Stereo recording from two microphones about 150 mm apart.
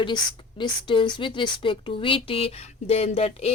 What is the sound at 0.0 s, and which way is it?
Speech, 35° left (ahead or behind).